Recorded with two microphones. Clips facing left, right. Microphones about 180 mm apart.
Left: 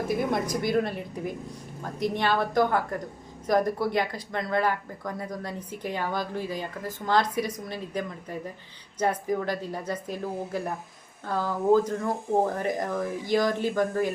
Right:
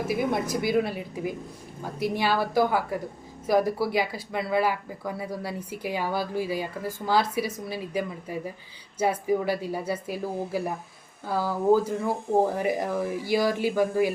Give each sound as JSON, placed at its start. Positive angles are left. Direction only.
{"t": 0.1, "sound": "a woman's voice", "side_deg": -5}